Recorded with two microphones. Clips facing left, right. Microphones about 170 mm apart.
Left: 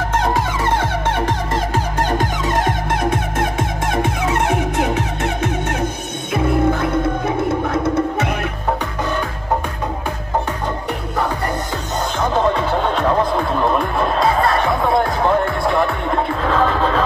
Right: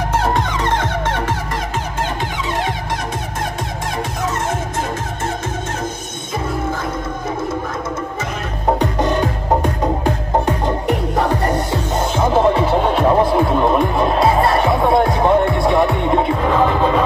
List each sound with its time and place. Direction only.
0.7 s music: 10° left (ahead or behind)
2.0 s music: 45° left (ahead or behind); by 8.3 s 65° left (ahead or behind)
8.7 s music: 35° right (ahead or behind)
11.7 s music: 20° right (ahead or behind)
13.7 s music: 5° right (ahead or behind)
14.2 s music: 25° right (ahead or behind)